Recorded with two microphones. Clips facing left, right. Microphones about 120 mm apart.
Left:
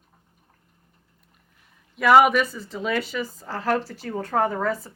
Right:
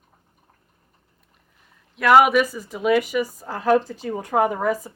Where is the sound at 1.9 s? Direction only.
Centre (ahead or behind).